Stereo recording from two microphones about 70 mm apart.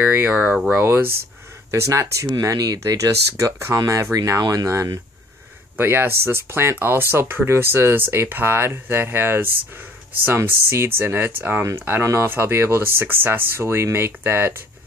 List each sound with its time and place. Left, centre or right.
0.0 s speech: right
0.7 s speech: right
1.7 s speech: right
2.4 s speech: right
4.4 s speech: right
5.8 s speech: right
12.0 s speech: right